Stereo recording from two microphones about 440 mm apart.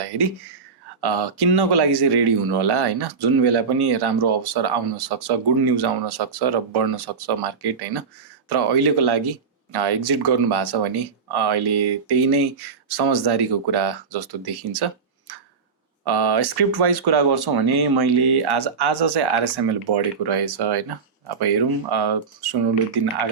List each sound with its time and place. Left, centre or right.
1.0 s speech: right
15.3 s tick-tock: right
16.0 s speech: right